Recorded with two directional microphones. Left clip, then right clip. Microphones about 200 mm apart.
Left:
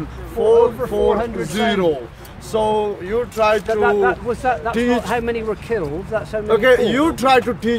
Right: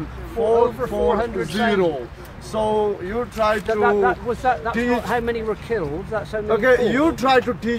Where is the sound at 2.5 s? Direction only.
45° left (ahead or behind).